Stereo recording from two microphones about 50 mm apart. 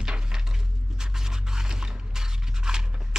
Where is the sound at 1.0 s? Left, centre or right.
Centre.